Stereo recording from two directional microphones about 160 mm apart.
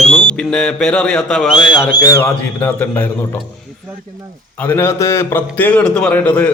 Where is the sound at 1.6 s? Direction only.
30° left (ahead or behind).